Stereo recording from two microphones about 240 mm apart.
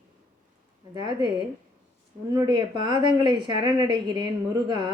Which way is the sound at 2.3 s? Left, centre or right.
Centre.